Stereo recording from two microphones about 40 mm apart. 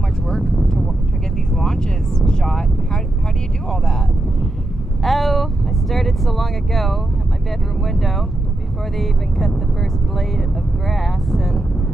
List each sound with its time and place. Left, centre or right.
0.3 s vehicle: centre
5.0 s vehicle: centre
7.8 s speech: centre
10.9 s speech: centre